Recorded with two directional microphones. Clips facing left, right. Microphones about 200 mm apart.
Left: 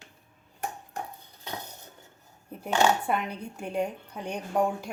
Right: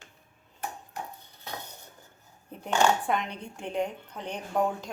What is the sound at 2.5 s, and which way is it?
Speech, 5° left (ahead or behind).